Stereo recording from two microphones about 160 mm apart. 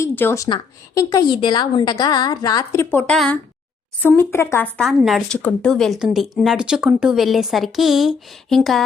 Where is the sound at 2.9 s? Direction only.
15° left (ahead or behind).